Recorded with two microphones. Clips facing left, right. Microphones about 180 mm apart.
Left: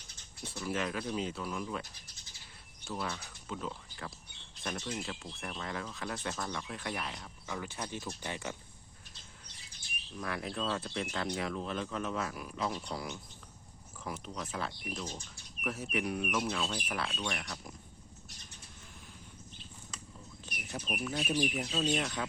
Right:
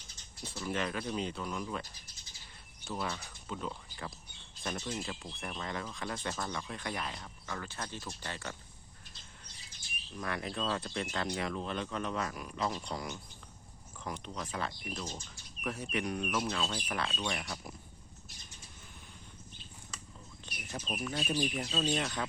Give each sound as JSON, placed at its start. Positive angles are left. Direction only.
{"t": 0.4, "sound": "speech", "side_deg": 0}
{"t": 7.4, "sound": "speech", "side_deg": 10}
{"t": 10.2, "sound": "speech", "side_deg": 0}
{"t": 20.4, "sound": "speech", "side_deg": 5}